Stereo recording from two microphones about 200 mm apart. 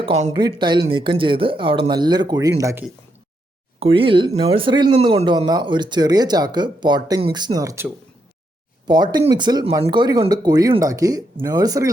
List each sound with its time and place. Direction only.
0.0 s speech: 30° right (ahead or behind); by 2.8 s 15° right (ahead or behind)
3.8 s speech: 25° right (ahead or behind)
8.9 s speech: 20° right (ahead or behind)